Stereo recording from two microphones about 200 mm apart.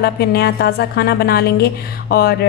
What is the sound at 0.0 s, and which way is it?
A woman's voice, 50° left (ahead or behind).